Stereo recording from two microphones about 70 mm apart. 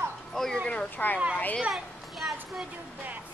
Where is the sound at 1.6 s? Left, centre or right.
Centre.